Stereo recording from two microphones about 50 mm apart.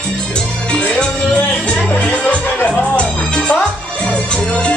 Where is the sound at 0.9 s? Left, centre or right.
Left.